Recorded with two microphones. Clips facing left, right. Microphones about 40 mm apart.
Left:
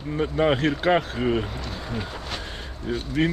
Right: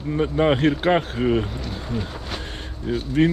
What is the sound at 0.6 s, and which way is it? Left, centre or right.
Speech, right.